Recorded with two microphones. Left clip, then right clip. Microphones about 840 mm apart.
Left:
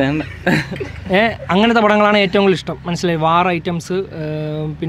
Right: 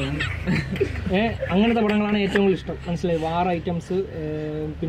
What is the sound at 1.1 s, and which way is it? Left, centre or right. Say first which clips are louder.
Speech: left 8 dB; left.